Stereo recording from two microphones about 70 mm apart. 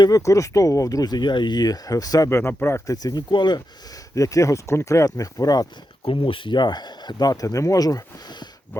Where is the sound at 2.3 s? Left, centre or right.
Left.